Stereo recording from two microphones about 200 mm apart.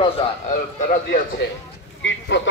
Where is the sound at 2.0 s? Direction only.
65° left (ahead or behind).